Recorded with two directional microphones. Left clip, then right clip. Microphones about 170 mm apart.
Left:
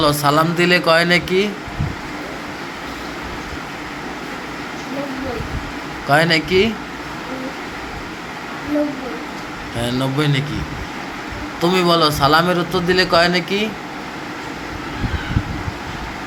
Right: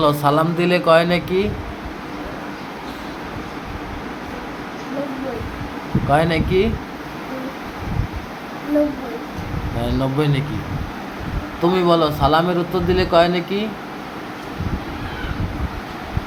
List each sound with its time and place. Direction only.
0.0 s a man's voice: 5° right (ahead or behind)
6.1 s a man's voice: centre (ahead or behind)
9.8 s a man's voice: 5° right (ahead or behind)
11.6 s a man's voice: centre (ahead or behind)